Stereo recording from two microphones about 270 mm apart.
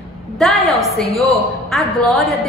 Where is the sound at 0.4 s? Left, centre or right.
Centre.